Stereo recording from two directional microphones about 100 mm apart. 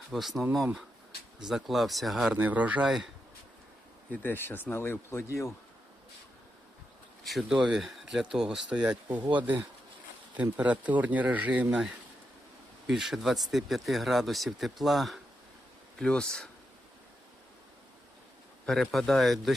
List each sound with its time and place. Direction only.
0.1 s speech: centre (ahead or behind)
2.3 s speech: 15° right (ahead or behind)
2.8 s speech: 5° right (ahead or behind)
4.1 s speech: 20° left (ahead or behind)
7.3 s speech: centre (ahead or behind)
10.3 s speech: 15° right (ahead or behind)
12.9 s speech: 5° right (ahead or behind)
18.6 s speech: 5° left (ahead or behind)